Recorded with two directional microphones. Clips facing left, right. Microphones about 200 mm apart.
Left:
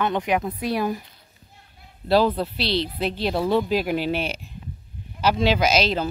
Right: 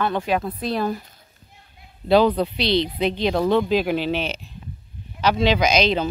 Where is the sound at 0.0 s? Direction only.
20° left (ahead or behind).